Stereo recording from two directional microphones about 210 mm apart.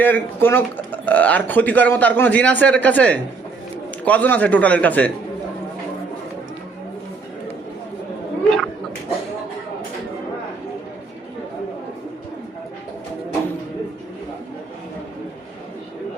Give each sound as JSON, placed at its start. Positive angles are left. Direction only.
{"t": 0.0, "sound": "speech", "side_deg": 10}
{"t": 8.4, "sound": "speech", "side_deg": 0}